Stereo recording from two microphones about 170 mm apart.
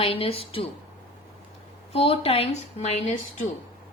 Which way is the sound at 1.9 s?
35° left (ahead or behind).